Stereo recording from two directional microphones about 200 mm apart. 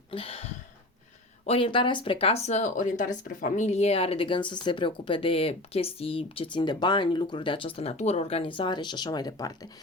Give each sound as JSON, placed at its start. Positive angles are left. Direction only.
{"t": 0.1, "sound": "speech", "side_deg": 30}
{"t": 1.5, "sound": "speech", "side_deg": 25}